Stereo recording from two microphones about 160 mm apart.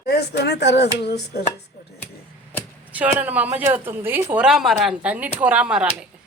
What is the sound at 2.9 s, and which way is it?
A woman's voice, 10° right (ahead or behind).